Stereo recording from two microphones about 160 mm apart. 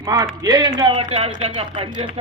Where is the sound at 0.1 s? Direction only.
25° right (ahead or behind).